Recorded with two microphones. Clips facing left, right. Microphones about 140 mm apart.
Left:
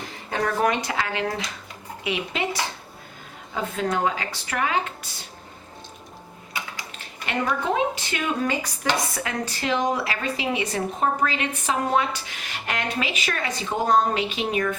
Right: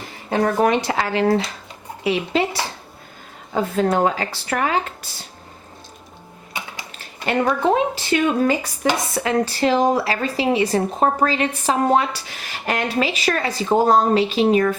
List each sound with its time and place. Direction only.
0.3 s speech: 30° right (ahead or behind)
6.5 s speech: 25° right (ahead or behind)